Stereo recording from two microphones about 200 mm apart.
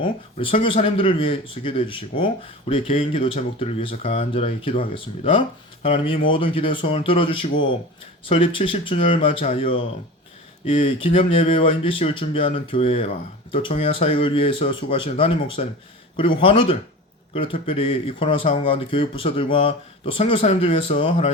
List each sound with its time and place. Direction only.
0.0 s speech: 25° left (ahead or behind)